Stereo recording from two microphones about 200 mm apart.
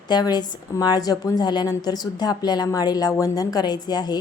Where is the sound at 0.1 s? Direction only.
20° left (ahead or behind).